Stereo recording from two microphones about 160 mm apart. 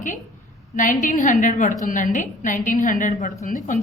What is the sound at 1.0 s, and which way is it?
A woman's voice, 55° left (ahead or behind).